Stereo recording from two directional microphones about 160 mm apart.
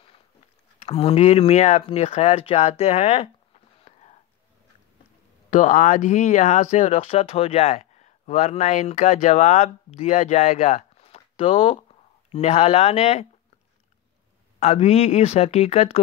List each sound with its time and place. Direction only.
0.8 s speech: 35° left (ahead or behind)
3.8 s whispering: 45° left (ahead or behind)
5.5 s speech: 50° left (ahead or behind)
14.6 s speech: 40° left (ahead or behind)